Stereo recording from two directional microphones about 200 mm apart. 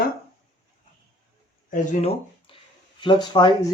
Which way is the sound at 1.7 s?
35° left (ahead or behind).